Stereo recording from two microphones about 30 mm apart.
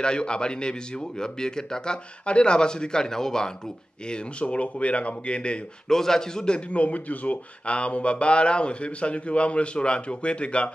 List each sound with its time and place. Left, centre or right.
0.0 s speech: left
2.2 s speech: left; by 3.5 s centre
4.1 s speech: left
5.9 s a man's voice: centre
6.7 s speech: left